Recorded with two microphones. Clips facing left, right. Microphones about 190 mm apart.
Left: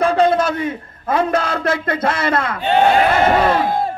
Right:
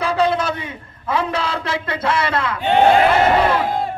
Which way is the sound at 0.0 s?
50° left (ahead or behind).